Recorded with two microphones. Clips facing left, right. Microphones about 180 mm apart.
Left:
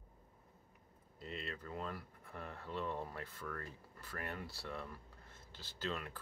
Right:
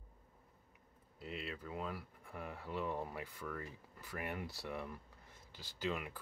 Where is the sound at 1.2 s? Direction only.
10° right (ahead or behind).